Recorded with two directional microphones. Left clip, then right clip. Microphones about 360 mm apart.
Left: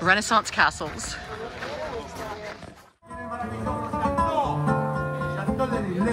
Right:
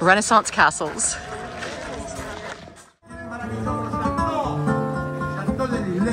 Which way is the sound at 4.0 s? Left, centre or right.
Left.